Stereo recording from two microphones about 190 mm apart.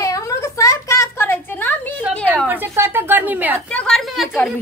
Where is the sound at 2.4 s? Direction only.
10° right (ahead or behind).